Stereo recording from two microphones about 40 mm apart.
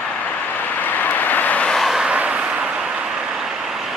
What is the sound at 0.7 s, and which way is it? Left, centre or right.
Vehicle, left.